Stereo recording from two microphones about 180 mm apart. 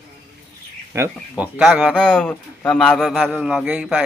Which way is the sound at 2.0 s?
5° left (ahead or behind).